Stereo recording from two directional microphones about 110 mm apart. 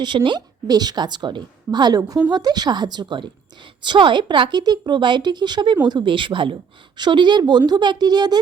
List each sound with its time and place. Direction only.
0.0 s a woman's voice: 45° right (ahead or behind)